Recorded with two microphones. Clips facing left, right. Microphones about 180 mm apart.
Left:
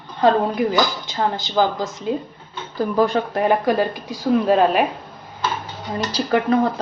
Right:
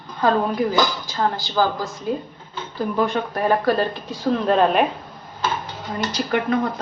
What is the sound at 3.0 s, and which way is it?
Speech, 35° left (ahead or behind).